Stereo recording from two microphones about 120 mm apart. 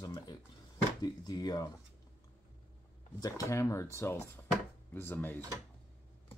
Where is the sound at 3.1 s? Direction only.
30° left (ahead or behind).